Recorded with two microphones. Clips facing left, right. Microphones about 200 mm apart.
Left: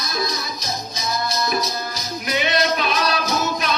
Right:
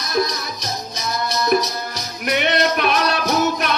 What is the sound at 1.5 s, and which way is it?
Music, 65° right (ahead or behind).